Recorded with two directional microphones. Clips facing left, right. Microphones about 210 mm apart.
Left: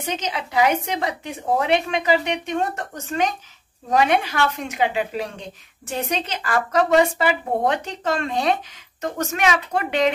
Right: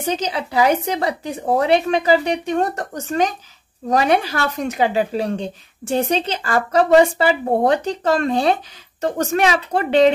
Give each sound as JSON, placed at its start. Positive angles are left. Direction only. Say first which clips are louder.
{"t": 0.0, "sound": "speech", "louder": "right 5 dB", "side_deg": -35}